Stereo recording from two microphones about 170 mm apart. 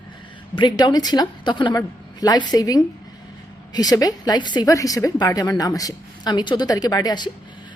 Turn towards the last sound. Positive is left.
turn(degrees=25)  # may be behind; listen again after turning